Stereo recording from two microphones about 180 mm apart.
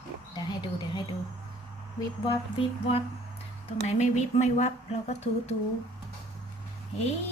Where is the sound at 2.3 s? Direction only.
30° left (ahead or behind).